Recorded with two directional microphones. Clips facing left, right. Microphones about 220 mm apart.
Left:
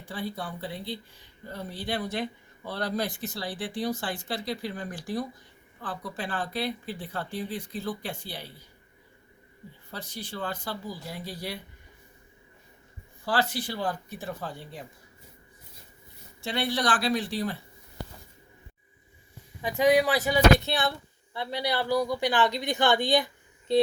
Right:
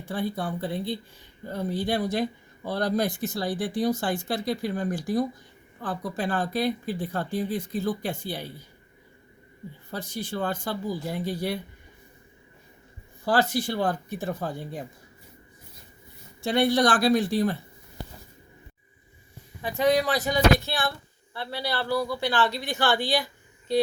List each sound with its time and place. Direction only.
0.1 s speech: 50° right (ahead or behind)
9.9 s speech: 45° right (ahead or behind)
13.2 s speech: 45° right (ahead or behind)
16.4 s speech: 45° right (ahead or behind)
19.6 s speech: 15° left (ahead or behind)
23.7 s a sound: 25° left (ahead or behind)